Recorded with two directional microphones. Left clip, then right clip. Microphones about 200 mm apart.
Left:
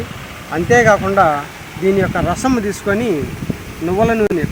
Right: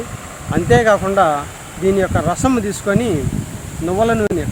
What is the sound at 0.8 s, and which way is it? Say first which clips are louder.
Speech: left 3 dB; 5° right (ahead or behind).